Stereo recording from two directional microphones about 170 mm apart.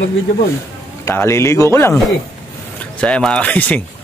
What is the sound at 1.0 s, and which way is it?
Speech, 15° left (ahead or behind).